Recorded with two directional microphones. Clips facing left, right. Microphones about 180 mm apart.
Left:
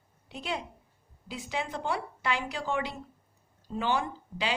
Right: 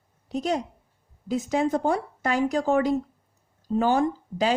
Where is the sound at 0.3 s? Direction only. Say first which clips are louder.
Right 9 dB; 40° right (ahead or behind).